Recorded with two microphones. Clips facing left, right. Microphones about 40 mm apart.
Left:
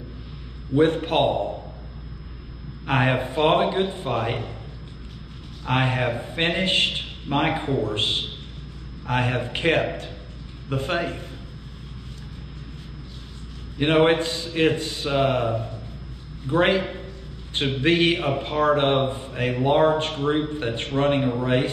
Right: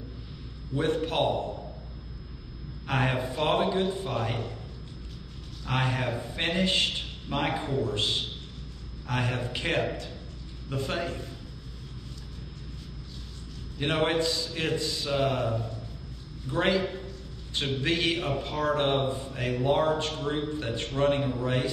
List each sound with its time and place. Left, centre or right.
0.7 s a man's voice: left
2.9 s a man's voice: left
5.7 s a man's voice: left
13.7 s a man's voice: left